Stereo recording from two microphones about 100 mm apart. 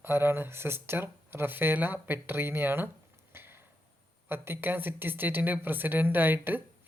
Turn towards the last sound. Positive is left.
turn(degrees=-20)  # may be behind; listen again after turning